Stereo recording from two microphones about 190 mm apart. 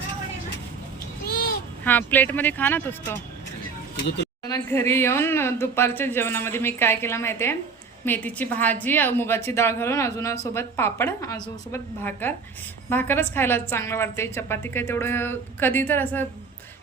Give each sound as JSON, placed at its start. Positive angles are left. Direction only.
{"t": 1.2, "sound": "a sound", "side_deg": 50}
{"t": 1.8, "sound": "a woman's voice", "side_deg": 10}
{"t": 4.4, "sound": "a woman's voice", "side_deg": 15}